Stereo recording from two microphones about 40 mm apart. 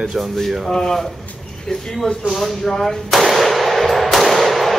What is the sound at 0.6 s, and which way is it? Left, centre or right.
Speech, centre.